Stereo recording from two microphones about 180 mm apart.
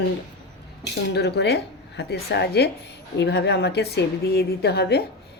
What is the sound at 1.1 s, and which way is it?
A woman's voice, 65° left (ahead or behind).